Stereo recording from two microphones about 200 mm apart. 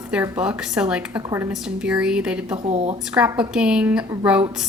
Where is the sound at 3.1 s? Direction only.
5° right (ahead or behind).